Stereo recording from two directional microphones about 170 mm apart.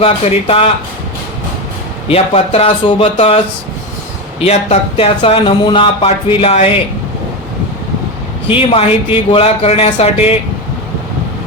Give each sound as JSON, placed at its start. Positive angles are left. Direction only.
{"t": 0.0, "sound": "speech", "side_deg": 35}
{"t": 2.0, "sound": "speech", "side_deg": 35}
{"t": 8.4, "sound": "speech", "side_deg": 30}